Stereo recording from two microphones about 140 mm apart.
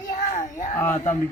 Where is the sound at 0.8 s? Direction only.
15° left (ahead or behind).